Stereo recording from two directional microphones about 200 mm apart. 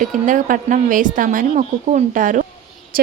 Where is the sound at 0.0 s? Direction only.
40° right (ahead or behind).